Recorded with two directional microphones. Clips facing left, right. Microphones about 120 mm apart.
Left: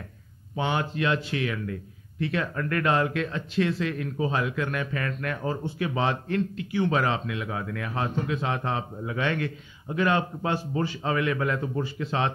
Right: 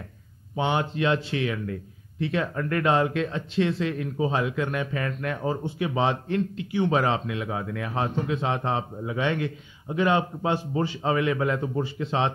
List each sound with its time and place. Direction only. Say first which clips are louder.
0.6 s a man's voice: right 2 dB; 25° right (ahead or behind)